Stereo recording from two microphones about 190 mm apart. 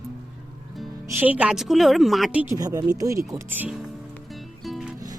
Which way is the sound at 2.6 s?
20° right (ahead or behind).